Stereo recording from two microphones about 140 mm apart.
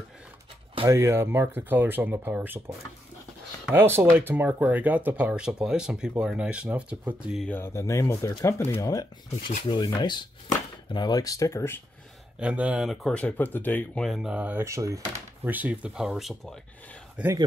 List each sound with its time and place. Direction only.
0.8 s speech: 20° right (ahead or behind)
3.7 s speech: 15° right (ahead or behind)
7.4 s speech: 15° left (ahead or behind)
9.7 s speech: 35° left (ahead or behind)
12.4 s speech: 10° right (ahead or behind); by 14.0 s 10° left (ahead or behind)
14.0 s speech: 5° right (ahead or behind)
14.6 s speech: 20° right (ahead or behind)
15.4 s speech: 10° right (ahead or behind)